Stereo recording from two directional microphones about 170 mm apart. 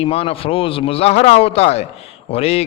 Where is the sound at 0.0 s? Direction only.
35° left (ahead or behind).